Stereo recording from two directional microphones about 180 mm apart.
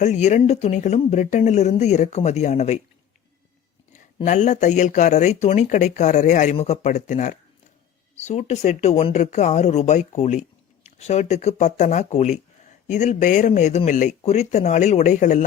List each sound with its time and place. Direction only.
0.0 s speech: 40° left (ahead or behind)
3.9 s speech: 40° left (ahead or behind)